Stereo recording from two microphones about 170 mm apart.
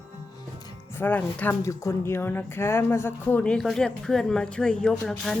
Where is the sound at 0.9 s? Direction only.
10° left (ahead or behind).